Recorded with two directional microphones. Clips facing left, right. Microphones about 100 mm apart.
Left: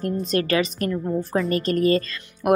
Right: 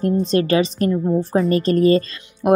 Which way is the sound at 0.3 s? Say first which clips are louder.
Right 2 dB; 30° right (ahead or behind).